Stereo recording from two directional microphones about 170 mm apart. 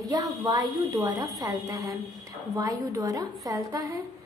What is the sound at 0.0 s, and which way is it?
A woman's voice, 20° right (ahead or behind).